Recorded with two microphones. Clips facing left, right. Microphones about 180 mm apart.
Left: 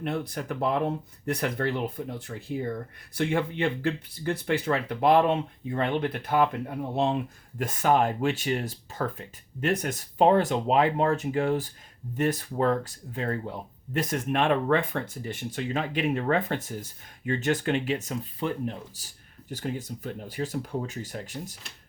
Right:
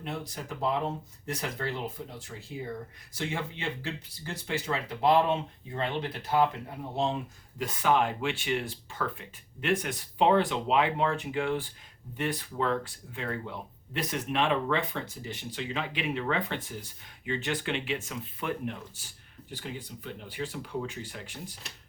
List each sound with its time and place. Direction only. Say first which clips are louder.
0.0 s speech: left 6 dB; 60° left (ahead or behind)
7.6 s speech: left 3 dB; 45° left (ahead or behind)